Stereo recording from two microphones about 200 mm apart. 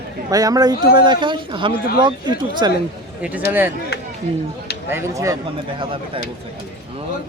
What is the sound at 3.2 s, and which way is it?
Speech, 10° right (ahead or behind).